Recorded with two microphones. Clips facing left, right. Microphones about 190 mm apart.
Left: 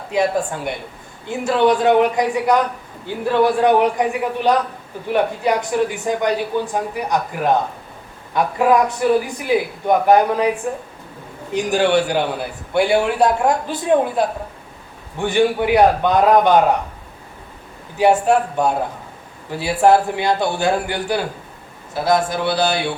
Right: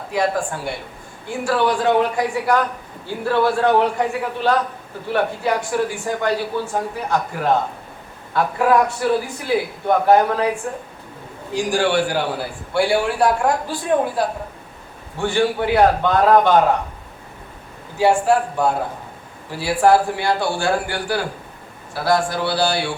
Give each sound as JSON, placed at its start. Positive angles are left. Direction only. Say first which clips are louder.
{"t": 0.1, "sound": "a man's voice", "louder": "left 2 dB", "side_deg": 20}
{"t": 11.5, "sound": "a man's voice", "louder": "left 2 dB", "side_deg": 20}
{"t": 17.9, "sound": "a man's voice", "louder": "left 1 dB", "side_deg": 20}